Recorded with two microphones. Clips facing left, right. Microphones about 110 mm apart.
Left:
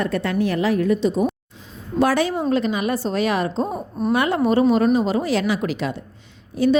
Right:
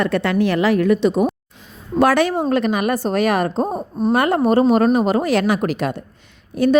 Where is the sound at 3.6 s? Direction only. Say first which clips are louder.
Right 3 dB; 25° right (ahead or behind).